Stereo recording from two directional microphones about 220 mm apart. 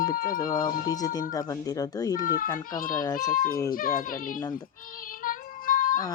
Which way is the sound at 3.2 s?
35° left (ahead or behind).